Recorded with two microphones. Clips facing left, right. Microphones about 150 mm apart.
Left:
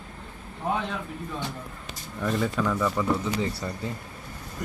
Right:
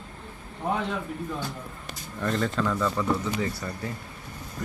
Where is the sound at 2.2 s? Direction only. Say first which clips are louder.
Even; 10° left (ahead or behind).